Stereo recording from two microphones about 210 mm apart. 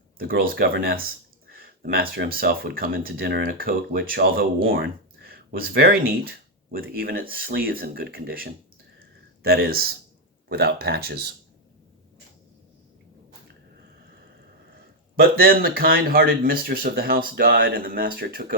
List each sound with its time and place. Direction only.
0.2 s speech: 45° right (ahead or behind)
15.1 s speech: 45° right (ahead or behind)